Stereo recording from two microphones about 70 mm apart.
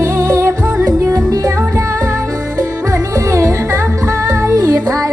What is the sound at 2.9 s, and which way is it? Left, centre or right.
Music, right.